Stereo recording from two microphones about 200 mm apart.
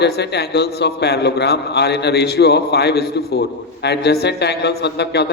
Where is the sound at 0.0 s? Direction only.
55° left (ahead or behind).